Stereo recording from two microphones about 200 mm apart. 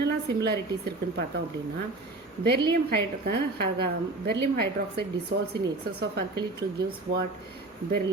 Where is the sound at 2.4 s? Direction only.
55° right (ahead or behind).